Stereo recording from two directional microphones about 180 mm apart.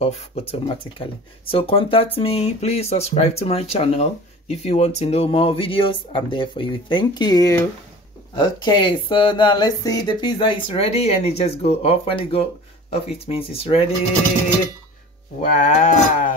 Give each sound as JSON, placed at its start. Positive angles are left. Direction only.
{"t": 0.0, "sound": "speech", "side_deg": 35}
{"t": 15.4, "sound": "speech", "side_deg": 45}